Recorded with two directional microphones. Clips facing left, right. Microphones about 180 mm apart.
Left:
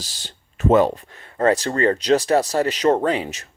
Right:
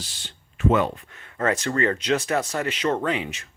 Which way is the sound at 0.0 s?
40° left (ahead or behind).